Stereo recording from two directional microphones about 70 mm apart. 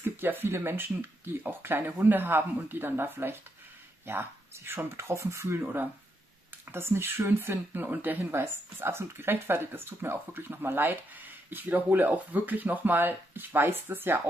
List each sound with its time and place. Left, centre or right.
0.0 s speech: right
4.9 s speech: right
6.7 s speech: right